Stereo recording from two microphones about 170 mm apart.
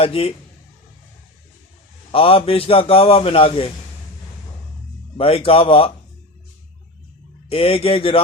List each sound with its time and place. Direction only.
0.0 s a man's voice: 35° left (ahead or behind)
2.1 s a man's voice: 35° left (ahead or behind)
5.1 s a man's voice: 35° left (ahead or behind)
7.5 s a man's voice: 35° left (ahead or behind)